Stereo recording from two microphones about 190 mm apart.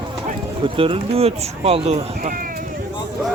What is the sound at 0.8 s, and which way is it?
Speech, 30° right (ahead or behind).